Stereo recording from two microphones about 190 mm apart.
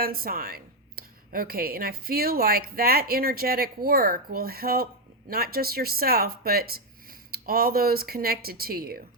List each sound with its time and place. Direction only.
0.0 s a woman's voice: 50° right (ahead or behind)